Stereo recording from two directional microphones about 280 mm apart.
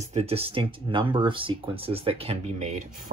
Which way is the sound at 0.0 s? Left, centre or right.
Right.